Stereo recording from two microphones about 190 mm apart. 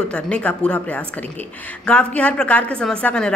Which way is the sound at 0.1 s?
5° left (ahead or behind).